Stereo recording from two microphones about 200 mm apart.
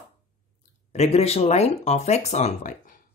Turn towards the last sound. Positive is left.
turn(degrees=40)  # may be behind; listen again after turning